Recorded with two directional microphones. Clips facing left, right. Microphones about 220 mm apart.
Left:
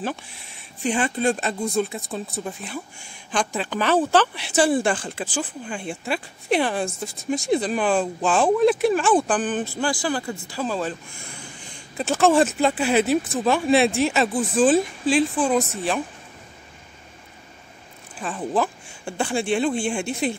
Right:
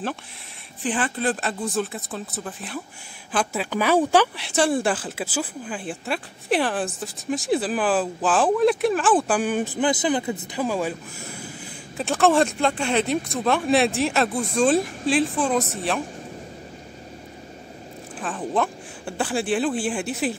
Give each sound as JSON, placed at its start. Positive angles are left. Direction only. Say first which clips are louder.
{"t": 0.8, "sound": "speech", "louder": "left 2 dB", "side_deg": 15}
{"t": 1.2, "sound": "speech", "louder": "left 2 dB", "side_deg": 0}
{"t": 4.4, "sound": "speech", "louder": "left 2 dB", "side_deg": 0}
{"t": 18.2, "sound": "speech", "louder": "left 1 dB", "side_deg": 0}